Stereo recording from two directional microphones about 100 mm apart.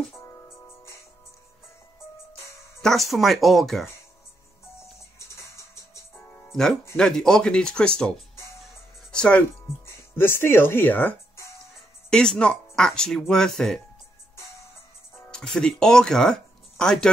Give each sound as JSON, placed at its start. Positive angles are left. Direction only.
{"t": 0.2, "sound": "music", "side_deg": 30}
{"t": 2.8, "sound": "speech", "side_deg": 0}
{"t": 5.3, "sound": "music", "side_deg": 30}
{"t": 7.0, "sound": "speech", "side_deg": 5}
{"t": 9.8, "sound": "speech", "side_deg": 25}
{"t": 12.1, "sound": "speech", "side_deg": 5}
{"t": 15.3, "sound": "speech", "side_deg": 5}